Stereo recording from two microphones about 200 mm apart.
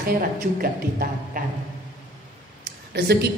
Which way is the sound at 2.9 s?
55° right (ahead or behind).